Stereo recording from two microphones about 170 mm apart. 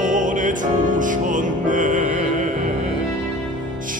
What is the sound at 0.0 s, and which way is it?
Music, 50° right (ahead or behind).